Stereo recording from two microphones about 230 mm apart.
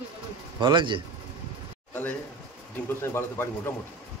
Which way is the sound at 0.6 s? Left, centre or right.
Right.